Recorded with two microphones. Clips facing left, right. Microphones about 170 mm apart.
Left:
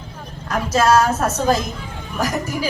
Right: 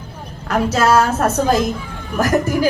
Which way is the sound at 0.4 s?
65° right (ahead or behind).